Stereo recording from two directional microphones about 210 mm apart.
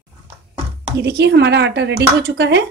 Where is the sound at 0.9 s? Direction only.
50° right (ahead or behind).